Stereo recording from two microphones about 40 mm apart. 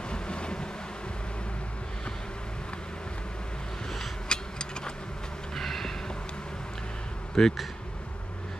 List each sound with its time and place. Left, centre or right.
0.1 s waves: left
4.3 s a sound: centre
5.5 s vehicle: centre
7.4 s speech: centre